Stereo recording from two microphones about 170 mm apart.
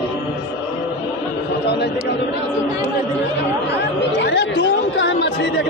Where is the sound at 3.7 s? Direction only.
90° left.